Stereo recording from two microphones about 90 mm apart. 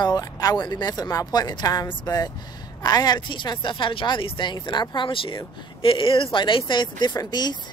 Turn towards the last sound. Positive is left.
turn(degrees=50)  # may be behind; listen again after turning